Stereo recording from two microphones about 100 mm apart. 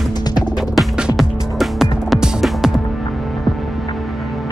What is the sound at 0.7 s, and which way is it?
Music, 5° right (ahead or behind).